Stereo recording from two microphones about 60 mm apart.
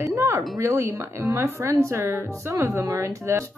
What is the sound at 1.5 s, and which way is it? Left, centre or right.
Speech, right.